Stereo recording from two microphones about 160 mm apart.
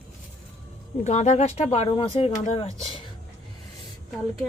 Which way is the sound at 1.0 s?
45° left (ahead or behind).